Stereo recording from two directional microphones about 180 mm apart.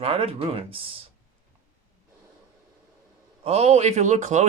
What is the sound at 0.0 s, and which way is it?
Speech, 30° right (ahead or behind).